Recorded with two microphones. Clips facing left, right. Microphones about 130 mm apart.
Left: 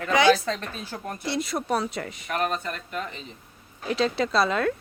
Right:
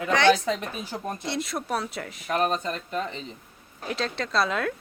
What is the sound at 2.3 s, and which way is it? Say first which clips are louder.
Speech: right 3 dB; 30° right (ahead or behind).